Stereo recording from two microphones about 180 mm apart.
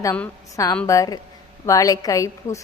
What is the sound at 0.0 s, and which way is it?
A woman's voice, 15° left (ahead or behind).